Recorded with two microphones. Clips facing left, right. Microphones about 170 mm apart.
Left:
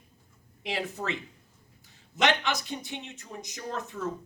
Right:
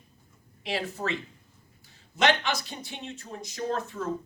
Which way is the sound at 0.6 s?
20° left (ahead or behind).